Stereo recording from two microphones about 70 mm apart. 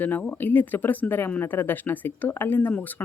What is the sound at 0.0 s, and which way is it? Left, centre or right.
Speech, left.